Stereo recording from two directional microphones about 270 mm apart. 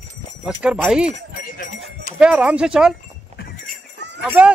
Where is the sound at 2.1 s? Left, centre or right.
Centre.